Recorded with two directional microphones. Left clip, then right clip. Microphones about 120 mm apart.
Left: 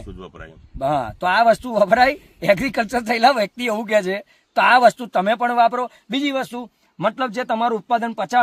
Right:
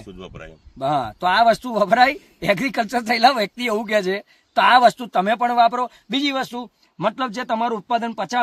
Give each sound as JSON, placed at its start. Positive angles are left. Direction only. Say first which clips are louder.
{"t": 0.2, "sound": "speech", "louder": "right 3 dB", "side_deg": -25}
{"t": 0.8, "sound": "speech", "louder": "even", "side_deg": 35}